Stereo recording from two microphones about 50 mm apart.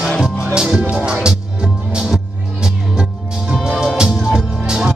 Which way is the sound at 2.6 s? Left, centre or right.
Centre.